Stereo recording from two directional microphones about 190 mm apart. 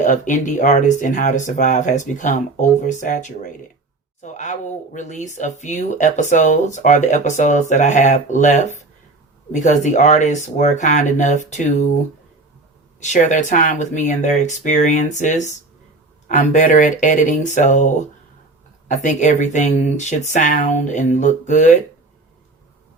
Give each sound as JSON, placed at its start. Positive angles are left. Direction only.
{"t": 0.0, "sound": "speech", "side_deg": 40}
{"t": 13.0, "sound": "speech", "side_deg": 40}